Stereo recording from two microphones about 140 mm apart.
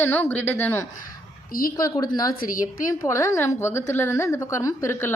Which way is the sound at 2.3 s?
85° left.